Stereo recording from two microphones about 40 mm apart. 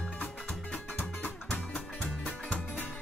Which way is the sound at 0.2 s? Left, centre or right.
Left.